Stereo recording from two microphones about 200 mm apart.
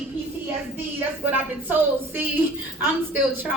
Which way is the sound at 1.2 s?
10° right (ahead or behind).